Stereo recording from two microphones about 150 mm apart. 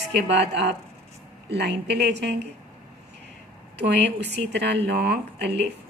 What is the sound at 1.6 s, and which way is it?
Speech, 90° right.